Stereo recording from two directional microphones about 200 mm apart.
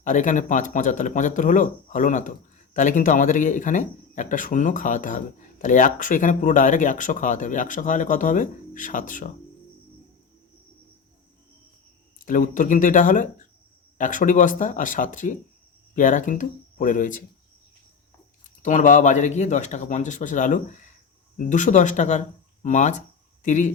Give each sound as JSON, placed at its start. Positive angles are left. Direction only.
{"t": 0.0, "sound": "a man's voice", "side_deg": 40}
{"t": 12.2, "sound": "a man's voice", "side_deg": 40}
{"t": 18.4, "sound": "a man's voice", "side_deg": 40}